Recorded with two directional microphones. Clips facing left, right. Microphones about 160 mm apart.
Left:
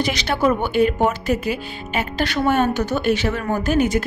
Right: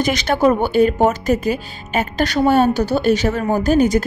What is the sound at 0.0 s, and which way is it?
A woman's voice, 50° right (ahead or behind).